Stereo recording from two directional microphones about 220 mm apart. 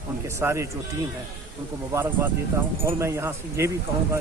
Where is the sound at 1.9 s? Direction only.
10° right (ahead or behind).